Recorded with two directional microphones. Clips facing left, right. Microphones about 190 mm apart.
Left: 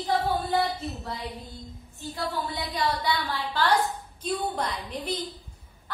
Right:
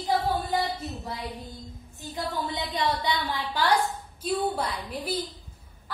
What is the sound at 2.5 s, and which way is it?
A woman's voice, 20° right (ahead or behind).